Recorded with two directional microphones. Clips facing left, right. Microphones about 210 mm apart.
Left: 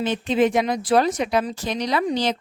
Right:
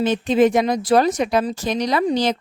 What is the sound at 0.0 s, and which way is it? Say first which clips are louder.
Speech: right 4 dB; 45° right (ahead or behind).